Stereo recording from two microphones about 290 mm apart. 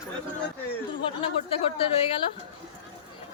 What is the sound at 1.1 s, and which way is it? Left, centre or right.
Speech, centre.